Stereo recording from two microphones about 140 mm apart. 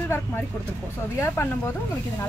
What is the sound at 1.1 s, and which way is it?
Speech, 20° left (ahead or behind).